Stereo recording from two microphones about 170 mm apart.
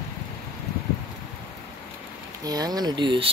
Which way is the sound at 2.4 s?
20° right (ahead or behind).